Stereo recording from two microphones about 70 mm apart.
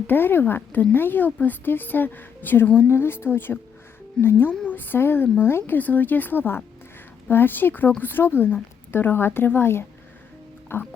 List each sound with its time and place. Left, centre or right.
0.1 s a woman's voice: left